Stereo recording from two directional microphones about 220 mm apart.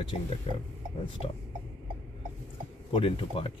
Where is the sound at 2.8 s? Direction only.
25° left (ahead or behind).